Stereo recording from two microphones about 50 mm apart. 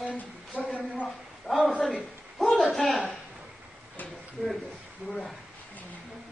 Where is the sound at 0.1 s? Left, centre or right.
Left.